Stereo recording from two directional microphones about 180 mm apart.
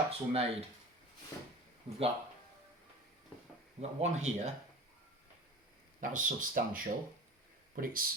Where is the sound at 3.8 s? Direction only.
40° right (ahead or behind).